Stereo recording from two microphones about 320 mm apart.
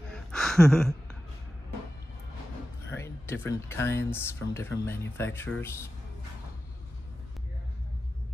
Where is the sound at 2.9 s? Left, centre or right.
Centre.